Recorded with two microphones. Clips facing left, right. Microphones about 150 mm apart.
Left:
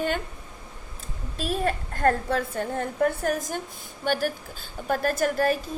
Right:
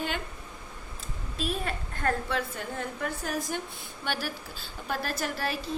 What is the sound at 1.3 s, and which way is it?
A woman's voice, 40° left (ahead or behind).